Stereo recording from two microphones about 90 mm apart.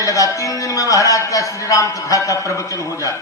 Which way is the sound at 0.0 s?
40° left (ahead or behind).